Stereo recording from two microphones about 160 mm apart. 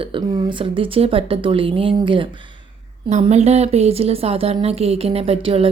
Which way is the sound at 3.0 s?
45° right (ahead or behind).